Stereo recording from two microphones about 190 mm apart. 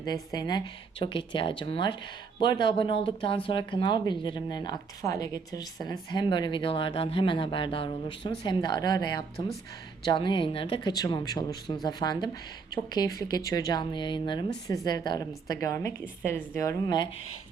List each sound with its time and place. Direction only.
0.0 s a woman's voice: 20° left (ahead or behind)